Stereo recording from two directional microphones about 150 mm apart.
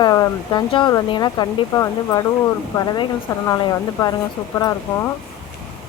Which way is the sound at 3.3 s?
20° left (ahead or behind).